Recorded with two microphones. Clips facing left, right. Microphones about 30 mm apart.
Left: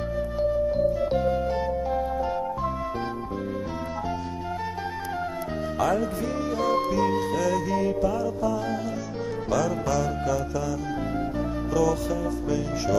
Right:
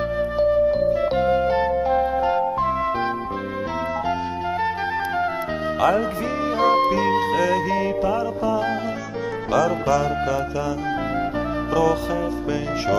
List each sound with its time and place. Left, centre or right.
0.4 s music: right
5.8 s speech: right
6.6 s music: right
11.7 s music: right